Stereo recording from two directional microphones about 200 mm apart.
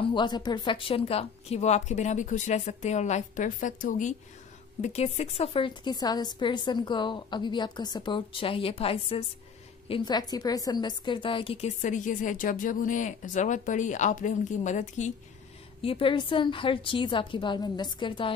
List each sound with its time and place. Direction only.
0.0 s a woman's voice: 25° left (ahead or behind)
15.8 s a woman's voice: 25° left (ahead or behind)